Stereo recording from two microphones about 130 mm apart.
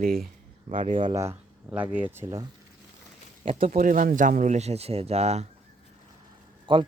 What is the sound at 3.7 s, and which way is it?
Speech, 90° right.